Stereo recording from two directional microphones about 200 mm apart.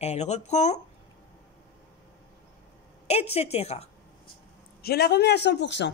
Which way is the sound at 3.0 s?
30° left (ahead or behind).